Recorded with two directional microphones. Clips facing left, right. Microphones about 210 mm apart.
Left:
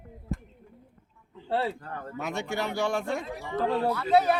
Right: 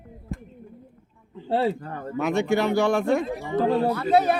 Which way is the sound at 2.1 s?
65° right (ahead or behind).